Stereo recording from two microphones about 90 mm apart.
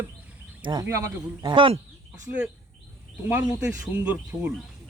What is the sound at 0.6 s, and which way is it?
Speech, 55° right (ahead or behind).